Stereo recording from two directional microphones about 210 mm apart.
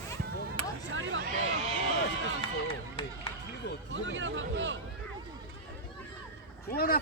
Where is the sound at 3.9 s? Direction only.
60° right (ahead or behind).